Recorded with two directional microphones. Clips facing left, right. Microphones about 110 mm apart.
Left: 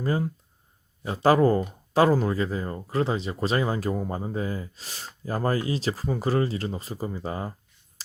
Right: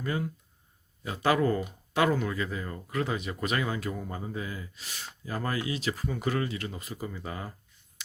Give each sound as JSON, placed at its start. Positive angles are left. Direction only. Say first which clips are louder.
{"t": 0.0, "sound": "speech", "louder": "left 5 dB", "side_deg": 35}